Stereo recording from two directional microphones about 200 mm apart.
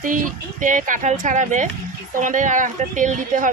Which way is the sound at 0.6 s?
40° right (ahead or behind).